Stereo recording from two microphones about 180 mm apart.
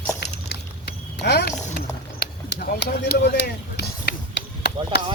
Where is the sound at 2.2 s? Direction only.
60° left (ahead or behind).